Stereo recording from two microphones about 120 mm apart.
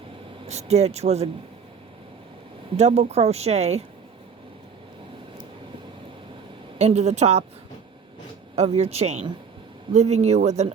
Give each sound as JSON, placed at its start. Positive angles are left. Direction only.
{"t": 0.4, "sound": "speech", "side_deg": -65}
{"t": 2.7, "sound": "speech", "side_deg": -65}
{"t": 6.7, "sound": "speech", "side_deg": -65}
{"t": 8.5, "sound": "speech", "side_deg": -60}